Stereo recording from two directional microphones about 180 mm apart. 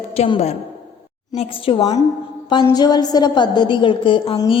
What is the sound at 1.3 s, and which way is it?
A woman's voice, 35° left (ahead or behind).